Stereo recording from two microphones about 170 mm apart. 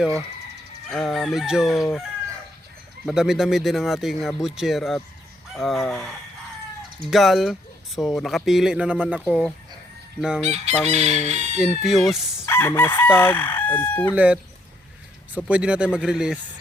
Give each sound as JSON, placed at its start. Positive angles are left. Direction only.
{"t": 0.9, "sound": "speech", "side_deg": 0}
{"t": 3.1, "sound": "speech", "side_deg": 0}
{"t": 9.2, "sound": "speech", "side_deg": 5}
{"t": 10.4, "sound": "chicken", "side_deg": -40}
{"t": 11.3, "sound": "speech", "side_deg": -45}
{"t": 11.6, "sound": "speech", "side_deg": 0}
{"t": 12.5, "sound": "chicken", "side_deg": 15}
{"t": 15.4, "sound": "speech", "side_deg": -5}